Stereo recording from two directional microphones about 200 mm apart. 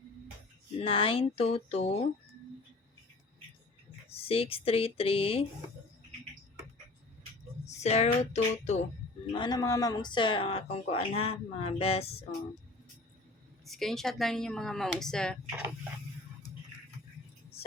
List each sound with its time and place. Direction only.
0.8 s speech: 25° left (ahead or behind)
4.1 s speech: 30° left (ahead or behind)
7.6 s speech: 35° left (ahead or behind)
9.3 s speech: 20° left (ahead or behind)
13.7 s speech: centre (ahead or behind)
17.6 s vehicle: 30° left (ahead or behind)